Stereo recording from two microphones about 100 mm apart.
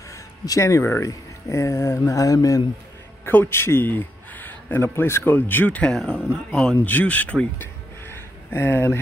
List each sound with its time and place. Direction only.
0.1 s speech: 30° left (ahead or behind)
3.3 s a man's voice: 20° left (ahead or behind)